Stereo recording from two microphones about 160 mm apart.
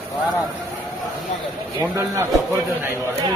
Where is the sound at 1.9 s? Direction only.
15° right (ahead or behind).